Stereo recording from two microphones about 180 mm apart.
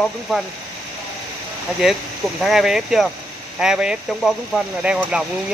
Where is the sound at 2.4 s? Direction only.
Centre (ahead or behind).